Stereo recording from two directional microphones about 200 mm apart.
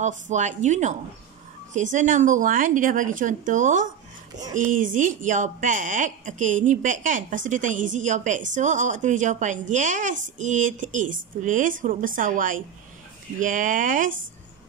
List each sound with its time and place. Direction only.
0.0 s speech: 35° right (ahead or behind)